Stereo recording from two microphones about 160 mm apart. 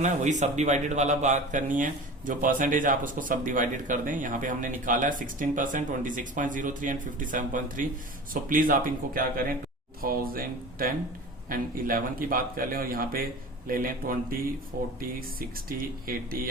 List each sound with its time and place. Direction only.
0.0 s speech: 50° right (ahead or behind)